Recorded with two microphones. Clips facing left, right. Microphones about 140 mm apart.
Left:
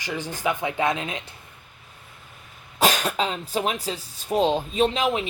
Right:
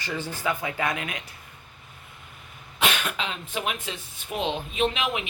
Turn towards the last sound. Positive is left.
turn(degrees=35)  # may be behind; listen again after turning